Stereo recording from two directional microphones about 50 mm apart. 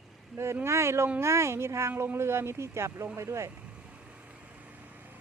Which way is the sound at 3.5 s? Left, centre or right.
Right.